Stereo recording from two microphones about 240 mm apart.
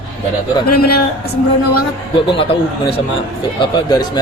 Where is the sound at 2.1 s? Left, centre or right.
Left.